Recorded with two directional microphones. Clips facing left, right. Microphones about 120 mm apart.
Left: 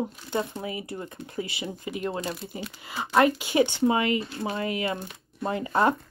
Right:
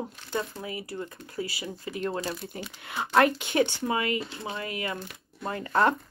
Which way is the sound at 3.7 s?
25° left (ahead or behind).